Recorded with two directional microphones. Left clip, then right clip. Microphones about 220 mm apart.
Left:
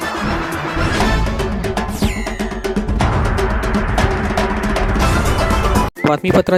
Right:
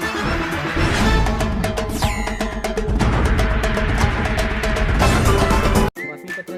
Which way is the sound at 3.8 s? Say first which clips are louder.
Left 3 dB; 15° left (ahead or behind).